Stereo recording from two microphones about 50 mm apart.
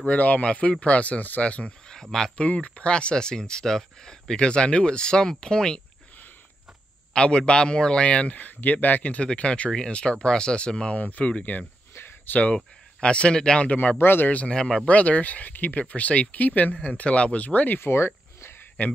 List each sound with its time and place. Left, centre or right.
0.0 s speech: left
2.0 s speech: centre
2.3 s speech: left
7.2 s speech: centre
11.0 s speech: left
13.9 s speech: left
14.5 s speech: centre
14.9 s speech: left
17.7 s a sound: left